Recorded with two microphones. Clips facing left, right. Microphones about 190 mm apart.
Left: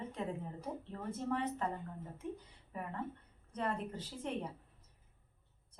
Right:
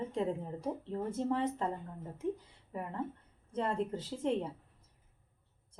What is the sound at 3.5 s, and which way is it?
Speech, 25° right (ahead or behind).